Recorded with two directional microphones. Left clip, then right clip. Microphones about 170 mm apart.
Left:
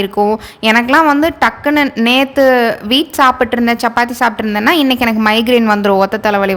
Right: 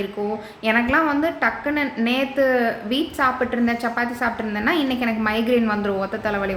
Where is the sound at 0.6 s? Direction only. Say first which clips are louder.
Left 9 dB; 85° left.